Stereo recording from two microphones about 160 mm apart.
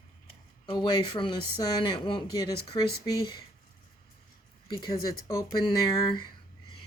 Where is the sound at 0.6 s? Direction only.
25° left (ahead or behind).